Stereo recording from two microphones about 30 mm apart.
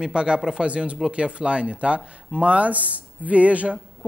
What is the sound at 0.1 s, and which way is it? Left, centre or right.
Speech, right.